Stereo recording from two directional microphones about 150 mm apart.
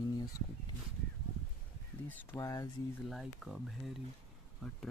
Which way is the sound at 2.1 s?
15° left (ahead or behind).